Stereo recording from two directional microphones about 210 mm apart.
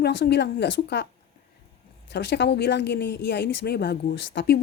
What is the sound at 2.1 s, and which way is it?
A woman's voice, 55° left (ahead or behind).